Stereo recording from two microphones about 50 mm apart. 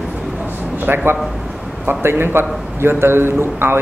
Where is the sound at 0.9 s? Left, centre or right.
Right.